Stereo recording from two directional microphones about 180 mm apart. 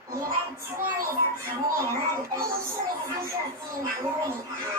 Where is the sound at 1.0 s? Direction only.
15° right (ahead or behind).